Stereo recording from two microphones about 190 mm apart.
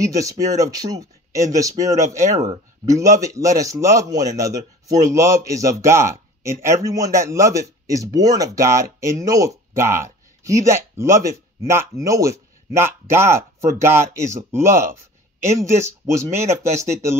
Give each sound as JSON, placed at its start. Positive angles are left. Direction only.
{"t": 0.0, "sound": "a man's voice", "side_deg": -15}
{"t": 16.7, "sound": "a man's voice", "side_deg": -15}